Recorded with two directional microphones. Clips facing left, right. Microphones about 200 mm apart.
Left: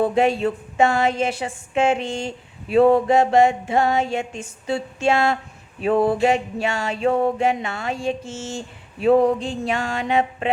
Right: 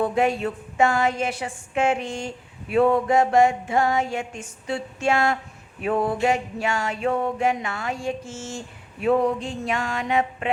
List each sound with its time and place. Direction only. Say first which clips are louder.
0.0 s a woman's voice: left 3 dB; 25° left (ahead or behind)